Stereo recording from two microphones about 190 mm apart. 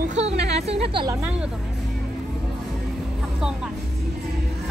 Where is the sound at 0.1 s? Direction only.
35° right (ahead or behind).